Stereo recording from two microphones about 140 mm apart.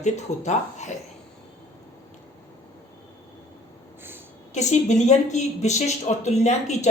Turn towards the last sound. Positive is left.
turn(degrees=55)  # may be behind; listen again after turning